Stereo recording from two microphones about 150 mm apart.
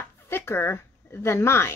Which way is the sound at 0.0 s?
15° left (ahead or behind).